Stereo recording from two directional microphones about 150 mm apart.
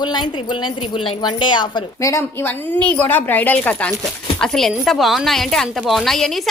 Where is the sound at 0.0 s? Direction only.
30° left (ahead or behind).